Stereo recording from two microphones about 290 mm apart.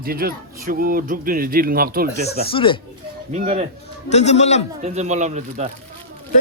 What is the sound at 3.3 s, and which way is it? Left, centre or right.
Speech, right.